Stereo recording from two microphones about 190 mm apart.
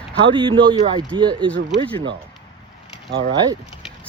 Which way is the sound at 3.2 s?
20° right (ahead or behind).